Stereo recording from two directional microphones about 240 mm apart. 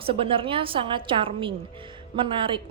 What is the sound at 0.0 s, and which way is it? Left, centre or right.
A woman's voice, right.